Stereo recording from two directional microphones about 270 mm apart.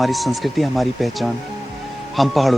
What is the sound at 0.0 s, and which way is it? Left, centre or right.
Speech, centre.